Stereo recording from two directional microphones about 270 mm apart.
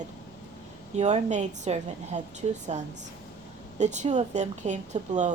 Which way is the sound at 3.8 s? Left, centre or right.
Right.